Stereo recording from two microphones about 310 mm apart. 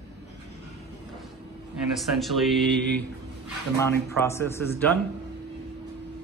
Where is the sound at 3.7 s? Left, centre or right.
Centre.